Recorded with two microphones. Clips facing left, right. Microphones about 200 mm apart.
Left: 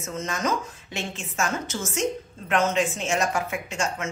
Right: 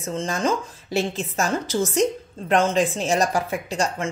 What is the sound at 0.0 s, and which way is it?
Speech, 30° right (ahead or behind).